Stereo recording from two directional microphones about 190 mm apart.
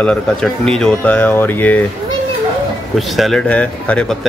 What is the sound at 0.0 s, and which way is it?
Speech, 5° left (ahead or behind).